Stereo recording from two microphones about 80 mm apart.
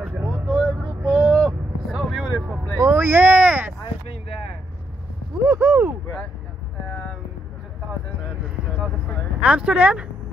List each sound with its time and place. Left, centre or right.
0.0 s vehicle: right
2.9 s a sound: right
5.4 s speech: right
9.4 s speech: centre